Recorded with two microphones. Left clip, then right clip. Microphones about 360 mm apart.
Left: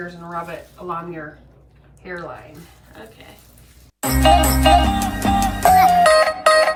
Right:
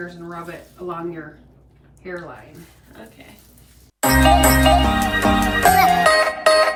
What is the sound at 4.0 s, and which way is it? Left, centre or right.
Music, centre.